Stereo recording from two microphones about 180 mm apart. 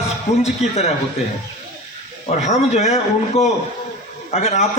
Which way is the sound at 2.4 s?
40° left (ahead or behind).